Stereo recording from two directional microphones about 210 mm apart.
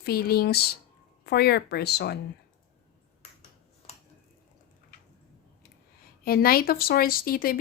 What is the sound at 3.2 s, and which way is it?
Finger snapping, 30° left (ahead or behind).